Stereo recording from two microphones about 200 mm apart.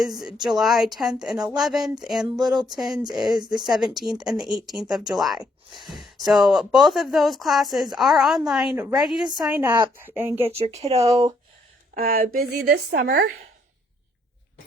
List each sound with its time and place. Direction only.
0.0 s a woman's voice: centre (ahead or behind)
10.4 s speech: 30° right (ahead or behind)
11.9 s speech: 45° right (ahead or behind)